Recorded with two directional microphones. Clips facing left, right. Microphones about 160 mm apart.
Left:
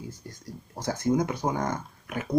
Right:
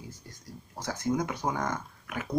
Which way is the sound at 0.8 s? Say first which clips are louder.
Left 4 dB; 30° left (ahead or behind).